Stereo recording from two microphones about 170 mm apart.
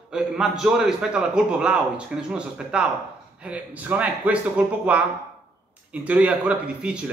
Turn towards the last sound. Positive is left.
turn(degrees=-5)  # may be behind; listen again after turning